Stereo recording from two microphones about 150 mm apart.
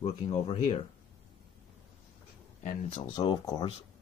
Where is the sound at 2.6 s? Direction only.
55° left (ahead or behind).